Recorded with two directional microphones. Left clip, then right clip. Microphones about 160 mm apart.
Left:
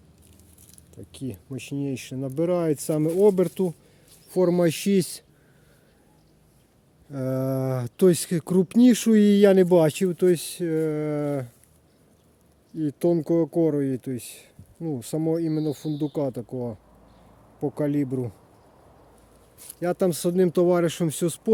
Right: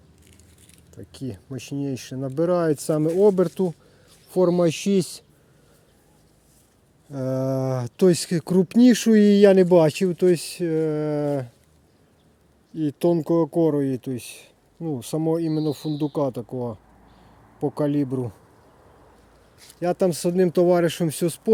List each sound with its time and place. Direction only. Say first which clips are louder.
1.1 s speech: right 1 dB; 5° right (ahead or behind); by 5.2 s 15° left (ahead or behind)
7.1 s speech: right 2 dB; 5° left (ahead or behind)
12.7 s speech: right 2 dB; 5° right (ahead or behind)
19.8 s speech: right 2 dB; centre (ahead or behind)